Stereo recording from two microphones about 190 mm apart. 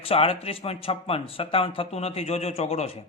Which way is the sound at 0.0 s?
30° left (ahead or behind).